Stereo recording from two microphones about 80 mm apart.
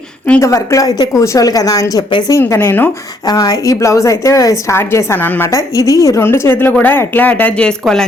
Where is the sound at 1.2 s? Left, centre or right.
Left.